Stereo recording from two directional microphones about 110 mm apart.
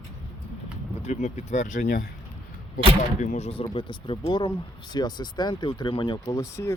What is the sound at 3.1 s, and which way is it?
Speech, 85° left.